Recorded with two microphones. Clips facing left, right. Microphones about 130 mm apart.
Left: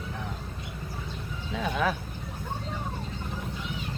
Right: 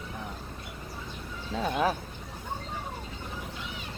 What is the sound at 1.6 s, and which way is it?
Speech, 35° right (ahead or behind).